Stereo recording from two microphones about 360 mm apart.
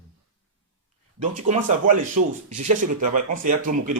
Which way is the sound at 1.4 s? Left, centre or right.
Right.